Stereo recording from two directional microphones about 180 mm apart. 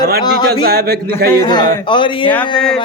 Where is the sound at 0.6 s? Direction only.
60° right (ahead or behind).